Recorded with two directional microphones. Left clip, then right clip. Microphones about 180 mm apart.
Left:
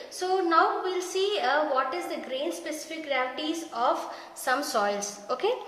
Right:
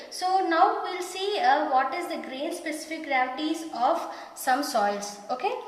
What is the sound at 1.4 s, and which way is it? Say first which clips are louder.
A woman's voice: right 5 dB; 25° left (ahead or behind).